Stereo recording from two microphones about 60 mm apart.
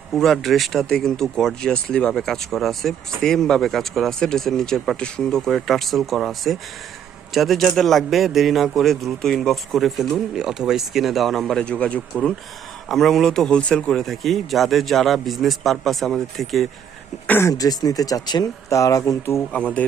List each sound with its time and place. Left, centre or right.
0.1 s a man's voice: centre
11.6 s speech: centre
12.9 s a man's voice: centre
17.5 s speech: left
18.7 s speech: left
19.5 s speech: centre